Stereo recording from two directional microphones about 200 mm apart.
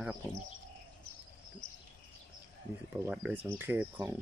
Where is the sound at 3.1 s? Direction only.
5° right (ahead or behind).